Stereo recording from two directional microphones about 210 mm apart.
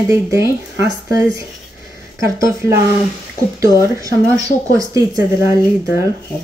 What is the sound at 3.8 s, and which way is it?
Speech, 15° right (ahead or behind).